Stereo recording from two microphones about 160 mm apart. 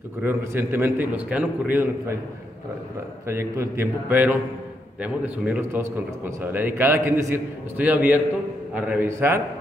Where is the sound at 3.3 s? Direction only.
15° right (ahead or behind).